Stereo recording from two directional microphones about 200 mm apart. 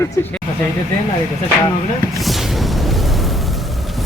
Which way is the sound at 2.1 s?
Centre (ahead or behind).